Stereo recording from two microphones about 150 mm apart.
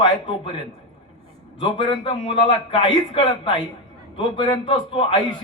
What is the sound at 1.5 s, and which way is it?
A man's voice, 30° left (ahead or behind).